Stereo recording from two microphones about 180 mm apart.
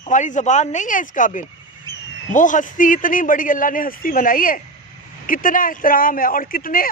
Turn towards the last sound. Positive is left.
turn(degrees=50)  # may be behind; listen again after turning